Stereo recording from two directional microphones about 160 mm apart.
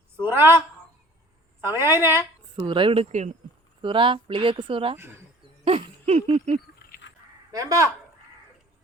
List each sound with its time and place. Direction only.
0.2 s a sound: 15° right (ahead or behind)
1.6 s a woman's voice: 15° right (ahead or behind)
2.6 s speech: 30° right (ahead or behind); by 3.3 s 45° right (ahead or behind)
3.8 s speech: 30° right (ahead or behind)
5.6 s a sound: 40° right (ahead or behind)
7.5 s speech: 20° right (ahead or behind)